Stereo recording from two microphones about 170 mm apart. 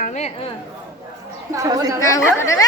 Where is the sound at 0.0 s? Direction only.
45° left (ahead or behind).